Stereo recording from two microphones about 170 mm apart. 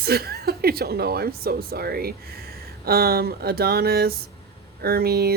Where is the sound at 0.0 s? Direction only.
65° right (ahead or behind).